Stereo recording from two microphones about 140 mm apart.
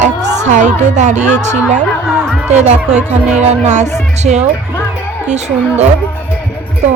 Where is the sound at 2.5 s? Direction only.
55° right (ahead or behind).